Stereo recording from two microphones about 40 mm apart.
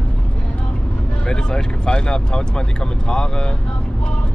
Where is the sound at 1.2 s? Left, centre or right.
Left.